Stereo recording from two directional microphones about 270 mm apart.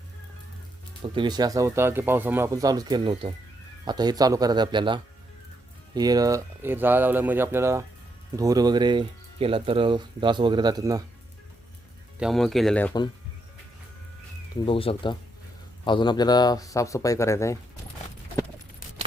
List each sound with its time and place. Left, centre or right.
1.0 s speech: centre
12.2 s speech: centre
14.6 s speech: centre